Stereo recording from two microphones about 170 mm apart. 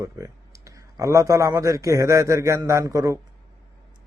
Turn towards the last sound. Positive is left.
turn(degrees=-20)  # may be behind; listen again after turning